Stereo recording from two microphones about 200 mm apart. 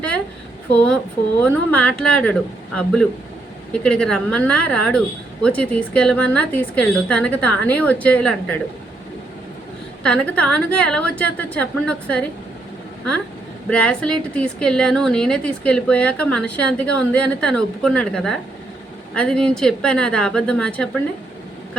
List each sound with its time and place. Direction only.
0.7 s a woman's voice: 5° left (ahead or behind)
10.0 s a woman's voice: 5° left (ahead or behind)
13.7 s a woman's voice: 5° left (ahead or behind)